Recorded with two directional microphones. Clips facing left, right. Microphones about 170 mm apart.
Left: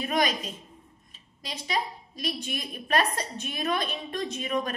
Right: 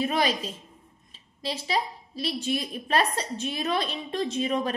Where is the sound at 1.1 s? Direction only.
30° right (ahead or behind).